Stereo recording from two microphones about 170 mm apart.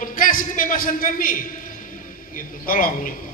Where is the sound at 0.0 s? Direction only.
55° left (ahead or behind).